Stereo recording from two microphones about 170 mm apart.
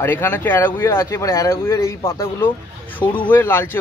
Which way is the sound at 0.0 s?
15° left (ahead or behind).